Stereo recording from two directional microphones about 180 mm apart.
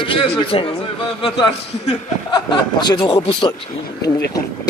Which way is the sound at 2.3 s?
25° left (ahead or behind).